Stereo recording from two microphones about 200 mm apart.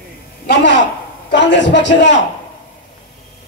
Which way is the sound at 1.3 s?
65° left (ahead or behind).